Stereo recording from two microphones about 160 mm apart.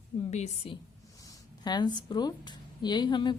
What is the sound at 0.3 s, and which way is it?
Speech, 45° left (ahead or behind).